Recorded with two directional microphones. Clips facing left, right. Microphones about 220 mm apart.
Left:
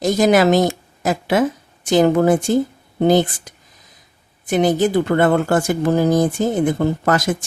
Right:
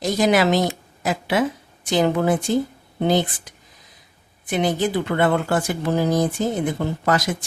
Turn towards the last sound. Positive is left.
turn(degrees=50)  # may be behind; listen again after turning